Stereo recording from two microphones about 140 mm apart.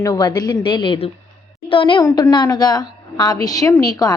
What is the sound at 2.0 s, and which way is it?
A woman's voice, 25° left (ahead or behind).